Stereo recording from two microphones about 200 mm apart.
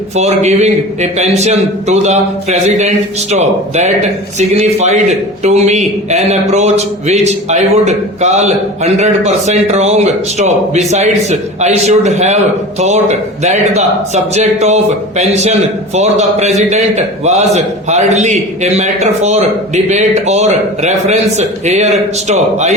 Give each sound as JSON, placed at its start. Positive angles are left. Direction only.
{"t": 0.2, "sound": "a man's voice", "side_deg": -35}